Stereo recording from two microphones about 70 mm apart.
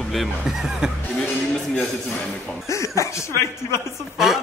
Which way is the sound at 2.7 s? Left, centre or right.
Left.